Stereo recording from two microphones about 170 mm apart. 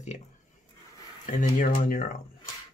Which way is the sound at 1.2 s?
50° left (ahead or behind).